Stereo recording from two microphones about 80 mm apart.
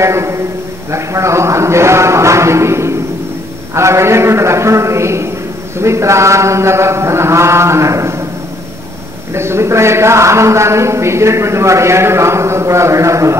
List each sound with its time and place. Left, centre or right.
0.0 s a man's voice: right
9.3 s a man's voice: right